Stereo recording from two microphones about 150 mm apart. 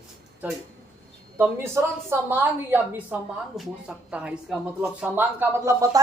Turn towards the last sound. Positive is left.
turn(degrees=-20)  # may be behind; listen again after turning